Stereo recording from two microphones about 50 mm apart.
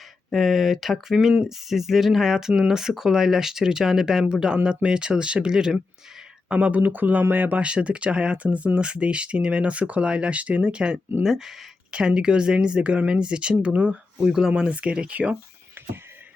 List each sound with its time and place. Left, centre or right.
0.3 s speech: centre
6.5 s speech: right
7.6 s speech: right
11.2 s speech: centre
11.9 s speech: centre
14.2 s speech: centre